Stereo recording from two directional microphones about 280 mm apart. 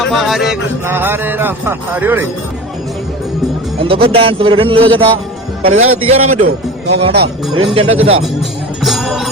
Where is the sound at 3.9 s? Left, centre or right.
Centre.